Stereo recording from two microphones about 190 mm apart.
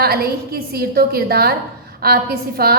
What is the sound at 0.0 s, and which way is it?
A woman's voice, 55° right (ahead or behind).